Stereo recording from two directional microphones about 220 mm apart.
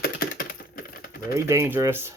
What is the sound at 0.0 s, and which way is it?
Typing, 40° left (ahead or behind).